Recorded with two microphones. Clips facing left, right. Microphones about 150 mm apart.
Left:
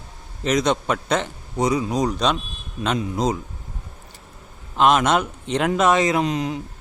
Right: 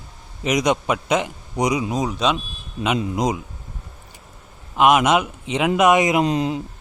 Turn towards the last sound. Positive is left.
turn(degrees=-30)  # may be behind; listen again after turning